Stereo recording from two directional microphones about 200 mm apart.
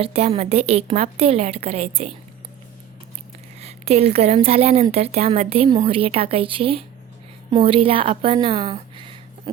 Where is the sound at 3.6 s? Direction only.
30° right (ahead or behind).